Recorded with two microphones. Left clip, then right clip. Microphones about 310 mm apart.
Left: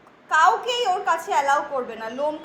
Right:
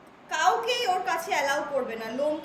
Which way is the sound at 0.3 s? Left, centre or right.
Centre.